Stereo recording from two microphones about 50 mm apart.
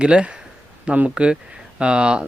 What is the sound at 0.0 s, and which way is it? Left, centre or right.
Speech, centre.